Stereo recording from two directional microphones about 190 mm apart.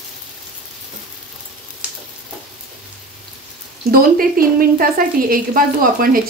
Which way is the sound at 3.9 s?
50° right (ahead or behind).